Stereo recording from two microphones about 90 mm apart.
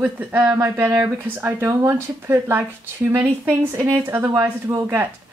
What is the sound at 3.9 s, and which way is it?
Speech, 30° right (ahead or behind).